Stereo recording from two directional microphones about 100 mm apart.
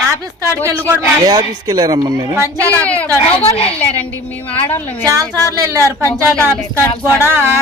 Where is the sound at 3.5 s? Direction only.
70° left (ahead or behind).